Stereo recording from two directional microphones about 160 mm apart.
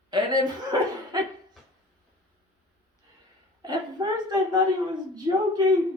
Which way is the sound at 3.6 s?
25° right (ahead or behind).